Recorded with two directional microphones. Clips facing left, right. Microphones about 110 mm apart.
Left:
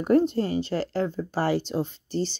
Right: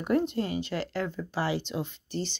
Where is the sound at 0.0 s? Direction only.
35° left (ahead or behind).